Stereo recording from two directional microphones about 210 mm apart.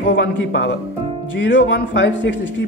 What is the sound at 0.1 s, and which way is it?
Speech, 60° left (ahead or behind).